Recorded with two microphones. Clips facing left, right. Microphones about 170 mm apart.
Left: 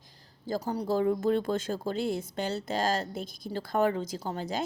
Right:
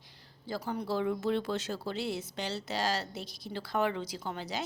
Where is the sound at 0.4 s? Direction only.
40° left (ahead or behind).